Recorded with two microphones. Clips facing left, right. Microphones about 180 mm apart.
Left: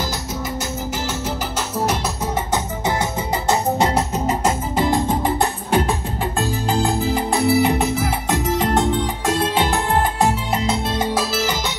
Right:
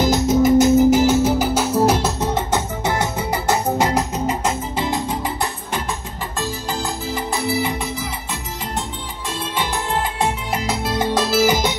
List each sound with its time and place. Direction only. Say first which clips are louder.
0.0 s music: right 11 dB; 20° right (ahead or behind)
3.4 s music: left 1 dB; 25° left (ahead or behind)
4.3 s music: left 2 dB; 45° left (ahead or behind)
7.3 s music: left 6 dB; 65° left (ahead or behind)
11.4 s music: right 6 dB; 15° right (ahead or behind)